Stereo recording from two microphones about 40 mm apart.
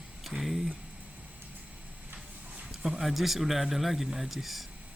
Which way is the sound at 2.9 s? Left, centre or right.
Centre.